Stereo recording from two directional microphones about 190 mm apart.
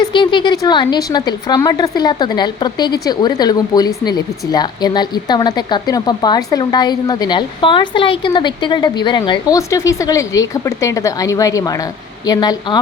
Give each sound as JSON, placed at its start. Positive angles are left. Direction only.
{"t": 0.0, "sound": "a woman's voice", "side_deg": 25}